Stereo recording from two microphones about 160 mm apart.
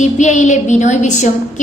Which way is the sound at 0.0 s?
50° left (ahead or behind).